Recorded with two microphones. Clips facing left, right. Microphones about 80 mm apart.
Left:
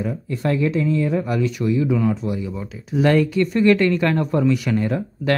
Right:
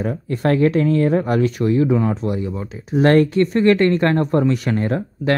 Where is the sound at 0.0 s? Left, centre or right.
Right.